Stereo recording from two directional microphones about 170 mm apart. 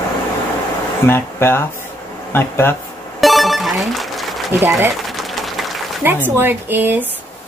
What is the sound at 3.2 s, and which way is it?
Music, centre (ahead or behind).